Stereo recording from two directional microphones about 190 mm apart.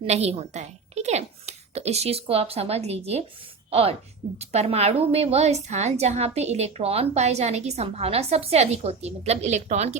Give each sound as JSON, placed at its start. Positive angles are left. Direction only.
{"t": 0.0, "sound": "a woman's voice", "side_deg": -35}